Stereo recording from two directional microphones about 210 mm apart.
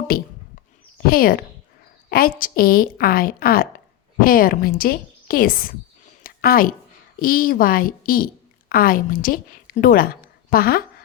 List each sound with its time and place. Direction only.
0.1 s a woman's voice: 45° left (ahead or behind)
6.2 s a sound: 45° left (ahead or behind)
7.2 s a woman's voice: 45° left (ahead or behind)